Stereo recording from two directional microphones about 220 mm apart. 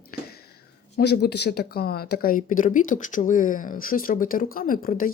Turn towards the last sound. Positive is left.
turn(degrees=40)  # may be behind; listen again after turning